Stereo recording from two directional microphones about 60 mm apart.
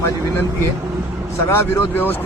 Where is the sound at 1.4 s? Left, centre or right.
Left.